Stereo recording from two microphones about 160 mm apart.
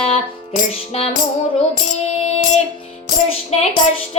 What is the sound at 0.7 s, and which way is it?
Child singing, 40° left (ahead or behind).